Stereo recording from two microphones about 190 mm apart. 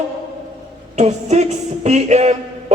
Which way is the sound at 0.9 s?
35° right (ahead or behind).